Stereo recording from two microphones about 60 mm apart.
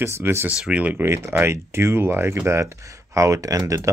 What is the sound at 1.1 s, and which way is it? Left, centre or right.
Speech, right.